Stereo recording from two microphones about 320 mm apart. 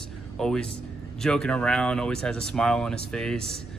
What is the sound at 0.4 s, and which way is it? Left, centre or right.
A man's voice, centre.